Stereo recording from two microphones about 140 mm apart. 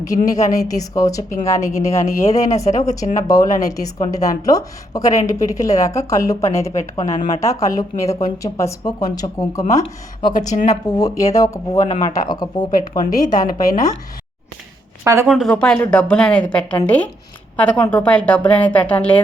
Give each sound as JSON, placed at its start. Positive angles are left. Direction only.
{"t": 0.3, "sound": "a woman's voice", "side_deg": 25}
{"t": 2.6, "sound": "speech", "side_deg": 60}
{"t": 3.2, "sound": "a woman's voice", "side_deg": 25}
{"t": 7.0, "sound": "speech", "side_deg": 55}
{"t": 7.3, "sound": "a woman's voice", "side_deg": 25}
{"t": 10.5, "sound": "speech", "side_deg": 60}
{"t": 10.8, "sound": "a woman's voice", "side_deg": 25}
{"t": 15.0, "sound": "speech", "side_deg": -20}
{"t": 15.3, "sound": "a woman's voice", "side_deg": 5}